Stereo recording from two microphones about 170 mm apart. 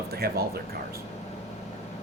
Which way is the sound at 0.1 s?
65° right (ahead or behind).